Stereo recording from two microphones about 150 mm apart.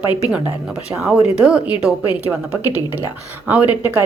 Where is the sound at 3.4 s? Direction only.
10° right (ahead or behind).